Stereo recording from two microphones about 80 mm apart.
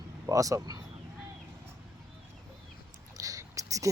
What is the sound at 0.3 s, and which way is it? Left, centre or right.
Speech, right.